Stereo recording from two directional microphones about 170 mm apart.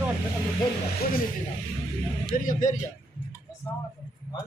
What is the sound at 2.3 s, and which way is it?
Speech, 55° left (ahead or behind).